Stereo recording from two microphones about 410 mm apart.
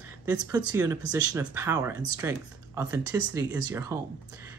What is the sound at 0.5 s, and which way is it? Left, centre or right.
Speech, centre.